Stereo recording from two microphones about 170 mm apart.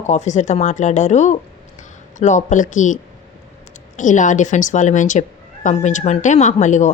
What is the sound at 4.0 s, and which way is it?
A woman's voice, 45° left (ahead or behind).